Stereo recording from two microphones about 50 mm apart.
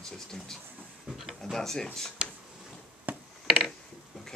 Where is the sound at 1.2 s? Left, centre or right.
Centre.